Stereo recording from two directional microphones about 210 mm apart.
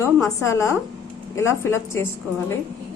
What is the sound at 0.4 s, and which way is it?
A woman's voice, 15° left (ahead or behind).